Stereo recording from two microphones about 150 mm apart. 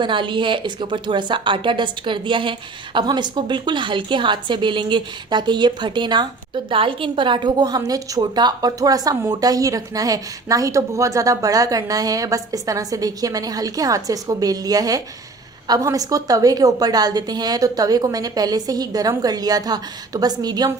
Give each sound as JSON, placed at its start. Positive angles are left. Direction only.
{"t": 0.0, "sound": "a woman's voice", "side_deg": -35}